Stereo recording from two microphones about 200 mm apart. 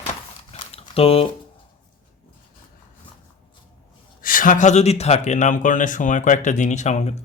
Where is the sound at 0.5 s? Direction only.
30° left (ahead or behind).